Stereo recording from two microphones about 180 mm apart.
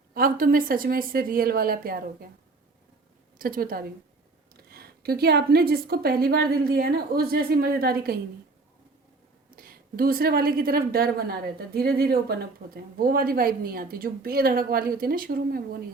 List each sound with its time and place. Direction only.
0.1 s a woman's voice: 55° right (ahead or behind)
3.3 s a woman's voice: 55° right (ahead or behind)
9.6 s a woman's voice: 55° right (ahead or behind)